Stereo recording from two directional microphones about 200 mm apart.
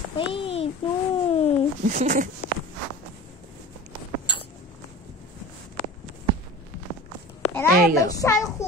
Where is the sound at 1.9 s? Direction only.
40° right (ahead or behind).